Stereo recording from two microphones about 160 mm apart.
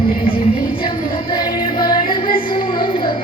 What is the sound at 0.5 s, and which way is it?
Music, 30° left (ahead or behind).